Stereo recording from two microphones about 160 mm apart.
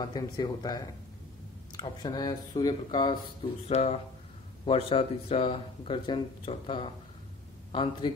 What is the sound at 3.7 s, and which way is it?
Speech, 40° left (ahead or behind).